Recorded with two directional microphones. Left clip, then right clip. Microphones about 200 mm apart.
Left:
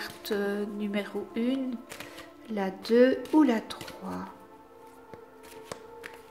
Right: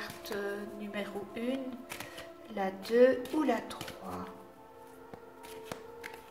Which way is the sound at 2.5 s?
45° left (ahead or behind).